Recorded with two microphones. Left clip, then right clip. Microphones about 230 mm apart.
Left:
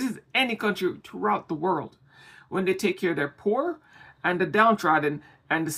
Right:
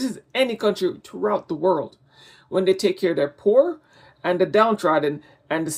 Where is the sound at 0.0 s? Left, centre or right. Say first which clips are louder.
Right 3 dB; centre.